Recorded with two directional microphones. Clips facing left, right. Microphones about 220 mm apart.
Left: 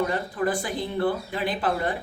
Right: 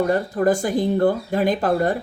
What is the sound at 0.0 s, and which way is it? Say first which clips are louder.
A woman's voice: right 6 dB; 45° right (ahead or behind).